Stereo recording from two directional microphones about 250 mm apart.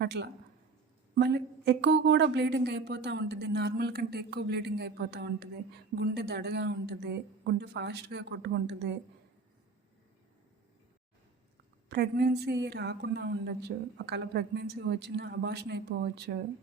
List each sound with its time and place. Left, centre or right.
0.0 s a woman's voice: right
11.9 s speech: right